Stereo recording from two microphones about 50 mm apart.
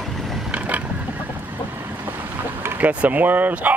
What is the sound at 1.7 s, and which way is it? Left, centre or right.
Boat, right.